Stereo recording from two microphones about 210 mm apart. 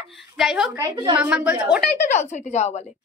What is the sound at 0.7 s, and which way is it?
Speech, 20° right (ahead or behind).